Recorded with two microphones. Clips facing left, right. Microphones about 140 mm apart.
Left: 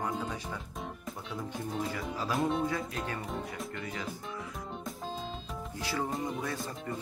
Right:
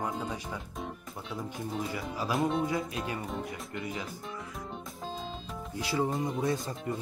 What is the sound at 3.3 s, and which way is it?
Speech, centre (ahead or behind).